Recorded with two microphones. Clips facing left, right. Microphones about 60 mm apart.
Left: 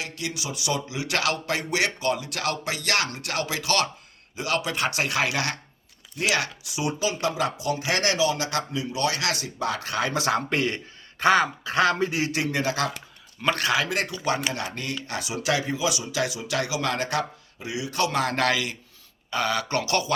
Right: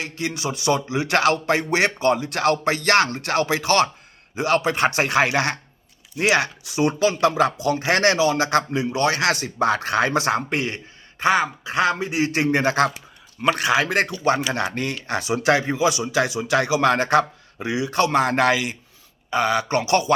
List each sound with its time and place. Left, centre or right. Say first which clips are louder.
0.0 s speech: right 6 dB; right
6.7 s speech: right 7 dB; right
11.2 s speech: right 1 dB; centre
12.3 s speech: right 6 dB; right
13.4 s speech: right 4 dB; centre
13.7 s speech: right 5 dB; right